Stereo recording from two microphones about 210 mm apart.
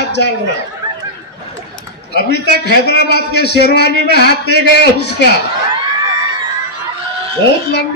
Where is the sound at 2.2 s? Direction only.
50° left (ahead or behind).